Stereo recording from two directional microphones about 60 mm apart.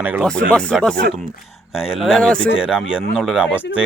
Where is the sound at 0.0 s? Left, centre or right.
Right.